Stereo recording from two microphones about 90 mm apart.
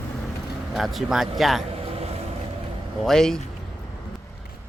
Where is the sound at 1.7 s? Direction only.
90° right.